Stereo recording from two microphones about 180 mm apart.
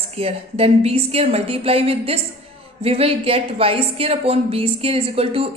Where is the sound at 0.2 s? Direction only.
35° right (ahead or behind).